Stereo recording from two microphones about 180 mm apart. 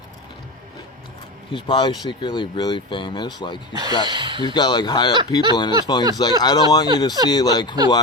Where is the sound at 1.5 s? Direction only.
25° left (ahead or behind).